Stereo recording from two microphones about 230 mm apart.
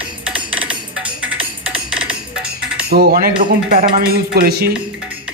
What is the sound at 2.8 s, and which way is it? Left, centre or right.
Cutlery, right.